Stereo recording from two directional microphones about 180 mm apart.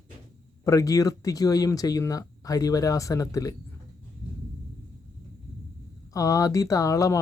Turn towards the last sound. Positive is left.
turn(degrees=15)  # may be behind; listen again after turning